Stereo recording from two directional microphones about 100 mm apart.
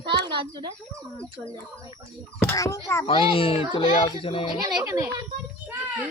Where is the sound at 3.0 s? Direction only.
65° left (ahead or behind).